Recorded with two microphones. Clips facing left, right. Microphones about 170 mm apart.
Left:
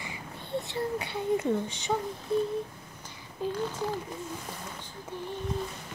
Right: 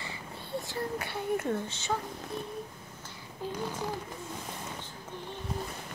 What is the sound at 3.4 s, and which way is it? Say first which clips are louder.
Speech: left 5 dB; 15° left (ahead or behind).